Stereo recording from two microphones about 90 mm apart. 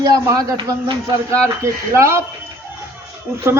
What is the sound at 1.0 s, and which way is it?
A man's voice, 35° right (ahead or behind).